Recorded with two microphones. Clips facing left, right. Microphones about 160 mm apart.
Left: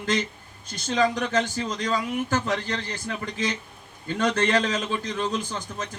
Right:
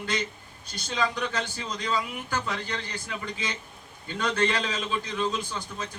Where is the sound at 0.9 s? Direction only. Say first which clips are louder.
Left 5 dB; 45° left (ahead or behind).